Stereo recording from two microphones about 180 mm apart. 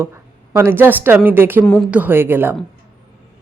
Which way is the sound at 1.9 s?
10° right (ahead or behind).